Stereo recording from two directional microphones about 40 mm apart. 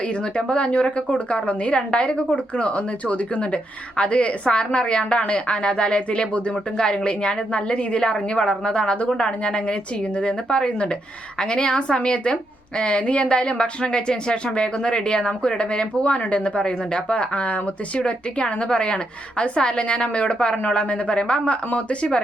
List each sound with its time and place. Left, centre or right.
0.0 s a woman's voice: left
6.7 s a woman's voice: left